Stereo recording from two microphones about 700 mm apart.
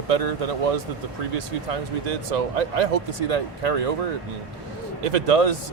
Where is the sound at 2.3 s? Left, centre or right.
Right.